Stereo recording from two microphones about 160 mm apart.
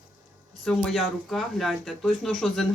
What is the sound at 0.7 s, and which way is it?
Speech, centre (ahead or behind).